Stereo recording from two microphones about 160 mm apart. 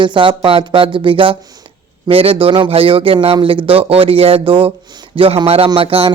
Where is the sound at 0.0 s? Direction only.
30° right (ahead or behind).